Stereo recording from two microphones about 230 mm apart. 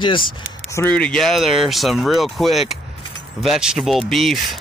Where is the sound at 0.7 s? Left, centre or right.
Centre.